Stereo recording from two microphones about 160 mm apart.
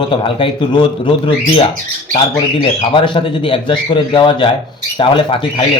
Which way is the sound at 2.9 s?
30° left (ahead or behind).